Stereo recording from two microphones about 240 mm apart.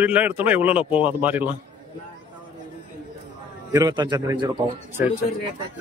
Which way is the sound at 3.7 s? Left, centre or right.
Centre.